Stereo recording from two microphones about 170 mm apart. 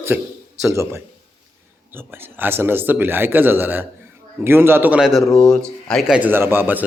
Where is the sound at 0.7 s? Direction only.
15° right (ahead or behind).